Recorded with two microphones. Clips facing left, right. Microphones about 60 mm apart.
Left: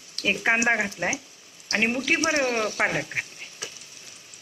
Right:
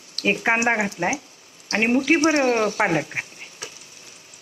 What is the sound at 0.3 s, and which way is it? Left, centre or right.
Speech, centre.